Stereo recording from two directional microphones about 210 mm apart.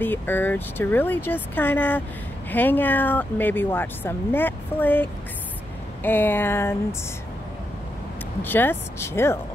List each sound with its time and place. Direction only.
0.0 s speech: 10° left (ahead or behind)
8.4 s speech: 10° left (ahead or behind)